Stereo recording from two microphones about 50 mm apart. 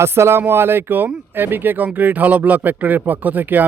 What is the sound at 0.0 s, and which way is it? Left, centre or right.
Speech, right.